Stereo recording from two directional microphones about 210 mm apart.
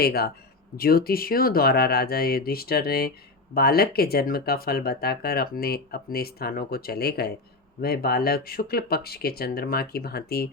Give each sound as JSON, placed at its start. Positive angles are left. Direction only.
{"t": 0.0, "sound": "speech", "side_deg": 50}